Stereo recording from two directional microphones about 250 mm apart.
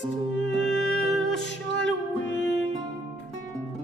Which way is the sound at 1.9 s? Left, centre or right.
Left.